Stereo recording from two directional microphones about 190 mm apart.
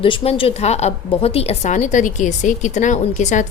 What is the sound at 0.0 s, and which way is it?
A woman's voice, 30° left (ahead or behind).